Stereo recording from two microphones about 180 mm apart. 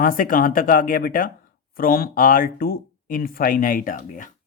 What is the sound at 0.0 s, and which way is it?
Speech, 50° left (ahead or behind).